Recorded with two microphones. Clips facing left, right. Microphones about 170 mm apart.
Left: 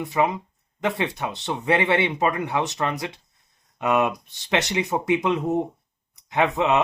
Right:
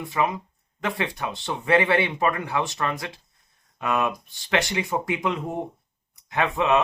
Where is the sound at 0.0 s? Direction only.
20° left (ahead or behind).